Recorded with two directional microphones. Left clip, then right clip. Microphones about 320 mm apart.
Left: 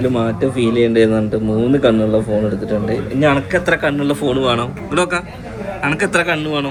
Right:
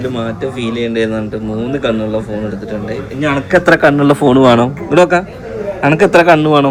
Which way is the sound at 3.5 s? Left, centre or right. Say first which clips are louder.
Right 7 dB; right.